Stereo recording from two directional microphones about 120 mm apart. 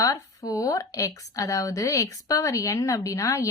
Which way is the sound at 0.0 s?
30° left (ahead or behind).